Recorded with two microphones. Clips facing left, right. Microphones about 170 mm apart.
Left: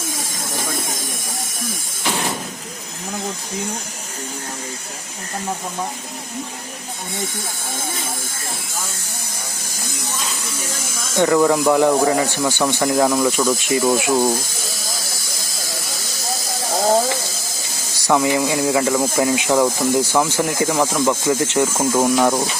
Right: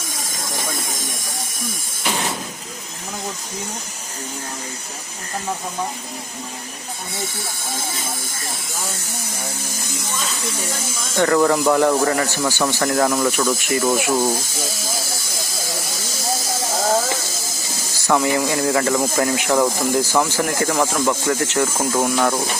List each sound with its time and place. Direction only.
11.1 s speech: 10° left (ahead or behind)
18.1 s speech: 15° left (ahead or behind)